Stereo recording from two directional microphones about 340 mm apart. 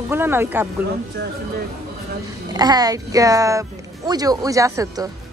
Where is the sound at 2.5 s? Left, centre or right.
Centre.